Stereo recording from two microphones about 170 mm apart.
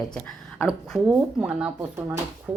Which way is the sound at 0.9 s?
15° right (ahead or behind).